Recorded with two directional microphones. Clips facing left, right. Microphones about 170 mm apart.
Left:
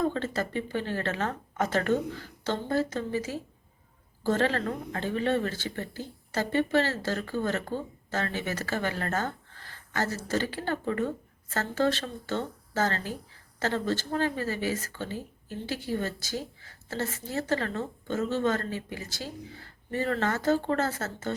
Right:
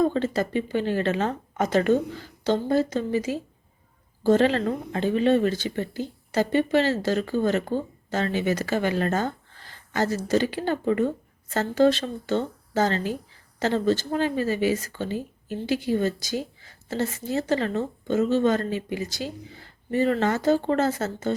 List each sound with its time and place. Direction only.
0.0 s speech: 15° right (ahead or behind)